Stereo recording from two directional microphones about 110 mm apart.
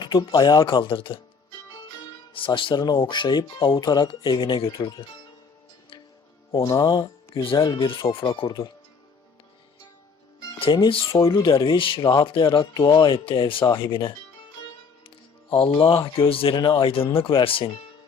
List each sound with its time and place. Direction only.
0.0 s speech: 45° left (ahead or behind)
2.3 s speech: 50° left (ahead or behind)
6.5 s speech: 35° left (ahead or behind); by 8.5 s 55° left (ahead or behind)
10.6 s speech: 50° left (ahead or behind)
11.1 s speech: 30° left (ahead or behind)
11.4 s speech: 50° left (ahead or behind)
11.9 s speech: 35° left (ahead or behind)
12.2 s speech: 50° left (ahead or behind)
13.1 s speech: 50° left (ahead or behind)